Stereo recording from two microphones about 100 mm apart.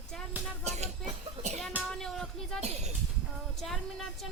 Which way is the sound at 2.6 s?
90° right.